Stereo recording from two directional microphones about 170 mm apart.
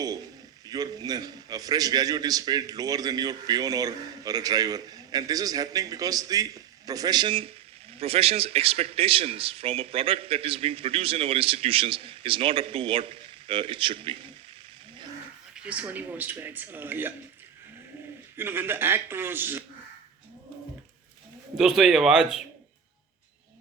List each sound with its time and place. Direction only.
0.7 s a man's voice: 25° right (ahead or behind)
15.5 s speech: 5° right (ahead or behind)
18.3 s speech: 15° right (ahead or behind)
21.5 s speech: centre (ahead or behind)